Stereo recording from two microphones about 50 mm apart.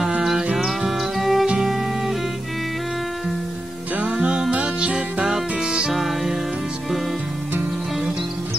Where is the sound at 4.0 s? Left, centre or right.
Right.